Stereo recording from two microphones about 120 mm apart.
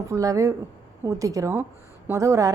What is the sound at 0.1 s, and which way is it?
A woman's voice, 25° right (ahead or behind).